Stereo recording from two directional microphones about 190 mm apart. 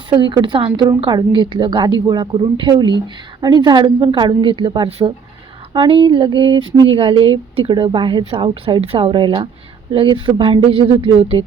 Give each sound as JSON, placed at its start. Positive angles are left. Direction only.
{"t": 0.1, "sound": "a woman's voice", "side_deg": -25}